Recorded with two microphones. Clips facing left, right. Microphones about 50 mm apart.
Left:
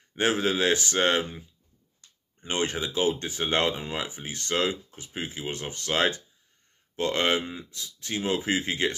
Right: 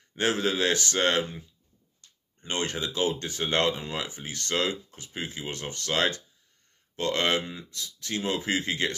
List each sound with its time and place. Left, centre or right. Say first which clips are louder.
0.1 s speech: left 1 dB; centre
2.4 s speech: left 2 dB; centre